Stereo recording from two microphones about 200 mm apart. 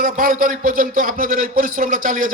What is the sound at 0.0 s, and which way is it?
A man's voice, 45° right (ahead or behind).